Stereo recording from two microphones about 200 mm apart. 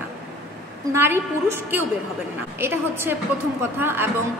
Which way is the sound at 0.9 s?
10° right (ahead or behind).